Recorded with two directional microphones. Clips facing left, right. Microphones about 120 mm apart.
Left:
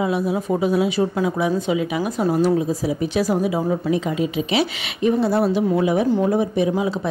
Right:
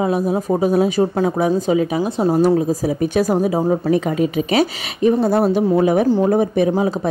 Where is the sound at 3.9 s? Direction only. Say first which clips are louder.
Right 4 dB; 50° right (ahead or behind).